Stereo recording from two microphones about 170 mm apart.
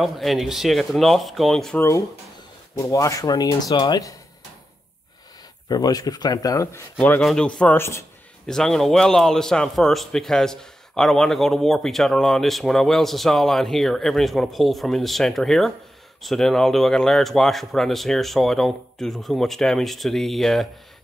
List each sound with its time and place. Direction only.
0.0 s a man's voice: centre (ahead or behind)
1.8 s speech: 15° left (ahead or behind)
5.7 s speech: 25° left (ahead or behind)
8.5 s a man's voice: 5° left (ahead or behind)